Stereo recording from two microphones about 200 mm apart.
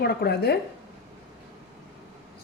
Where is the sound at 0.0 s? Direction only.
55° left (ahead or behind).